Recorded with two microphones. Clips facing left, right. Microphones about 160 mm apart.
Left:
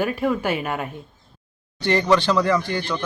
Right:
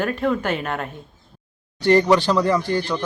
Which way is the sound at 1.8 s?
40° right (ahead or behind).